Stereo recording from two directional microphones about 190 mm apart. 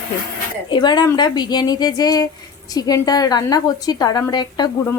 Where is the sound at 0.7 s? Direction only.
25° left (ahead or behind).